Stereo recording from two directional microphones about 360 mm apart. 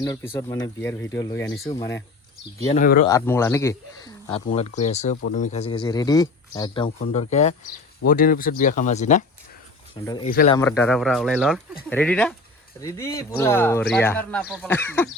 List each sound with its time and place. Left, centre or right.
0.0 s speech: centre
2.7 s speech: left
3.1 s speech: centre
10.6 s speech: centre